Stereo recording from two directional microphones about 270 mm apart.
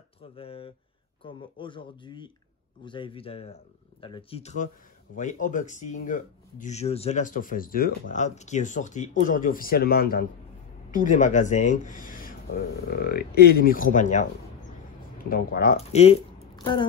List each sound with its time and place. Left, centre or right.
0.4 s speech: left